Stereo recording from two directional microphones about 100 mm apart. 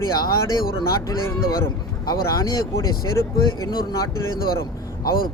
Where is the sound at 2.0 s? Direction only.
35° left (ahead or behind).